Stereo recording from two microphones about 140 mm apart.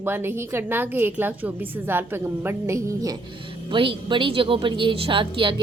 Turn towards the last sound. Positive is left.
turn(degrees=-35)  # may be behind; listen again after turning